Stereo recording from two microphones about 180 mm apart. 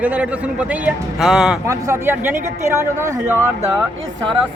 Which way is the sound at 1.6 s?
15° right (ahead or behind).